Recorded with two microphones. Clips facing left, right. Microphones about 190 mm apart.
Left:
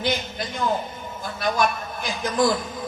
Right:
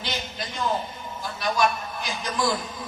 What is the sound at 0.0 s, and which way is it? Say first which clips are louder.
A man's voice: left 6 dB; 50° left (ahead or behind).